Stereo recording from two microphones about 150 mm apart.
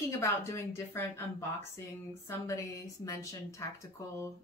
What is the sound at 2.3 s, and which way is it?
A woman's voice, 20° left (ahead or behind).